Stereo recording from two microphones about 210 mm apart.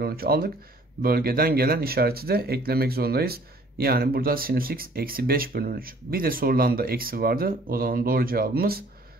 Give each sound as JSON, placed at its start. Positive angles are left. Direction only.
{"t": 0.0, "sound": "speech", "side_deg": -45}